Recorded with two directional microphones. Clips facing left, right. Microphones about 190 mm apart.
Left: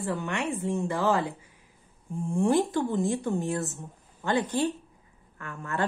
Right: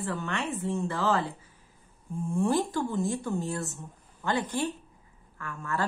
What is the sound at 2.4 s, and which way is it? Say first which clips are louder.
A woman's voice: left 3 dB; 20° left (ahead or behind).